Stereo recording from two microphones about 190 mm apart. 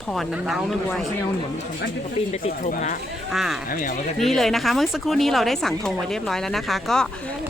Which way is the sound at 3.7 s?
45° left (ahead or behind).